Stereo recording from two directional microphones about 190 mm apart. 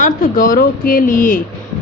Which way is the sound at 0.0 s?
45° left (ahead or behind).